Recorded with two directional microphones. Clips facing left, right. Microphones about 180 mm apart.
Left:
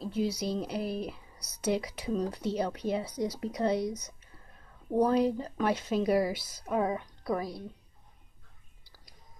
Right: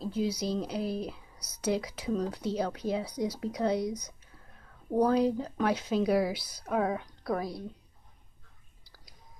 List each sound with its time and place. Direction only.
0.0 s a sound: 5° left (ahead or behind)
0.4 s speech: 5° left (ahead or behind)
5.0 s speech: 5° left (ahead or behind)